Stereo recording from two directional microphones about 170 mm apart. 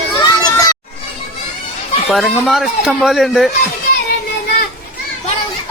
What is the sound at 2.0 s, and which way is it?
A man's voice, centre (ahead or behind).